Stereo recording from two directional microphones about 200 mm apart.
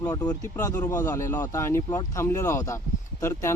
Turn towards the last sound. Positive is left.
turn(degrees=15)  # may be behind; listen again after turning